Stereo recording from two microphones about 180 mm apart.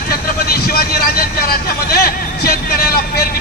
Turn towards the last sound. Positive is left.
turn(degrees=55)  # may be behind; listen again after turning